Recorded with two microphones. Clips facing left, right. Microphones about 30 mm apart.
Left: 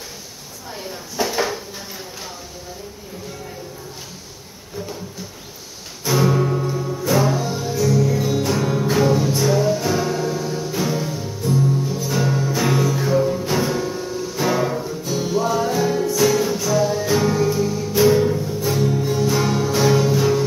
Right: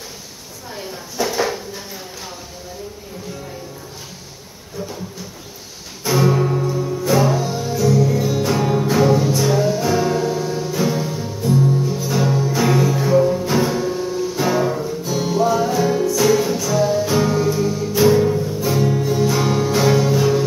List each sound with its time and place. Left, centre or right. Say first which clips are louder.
1.2 s drawer open or close: right 1 dB; left
6.0 s music: right 1 dB; centre
12.3 s music: right 3 dB; centre
14.8 s music: right 2 dB; centre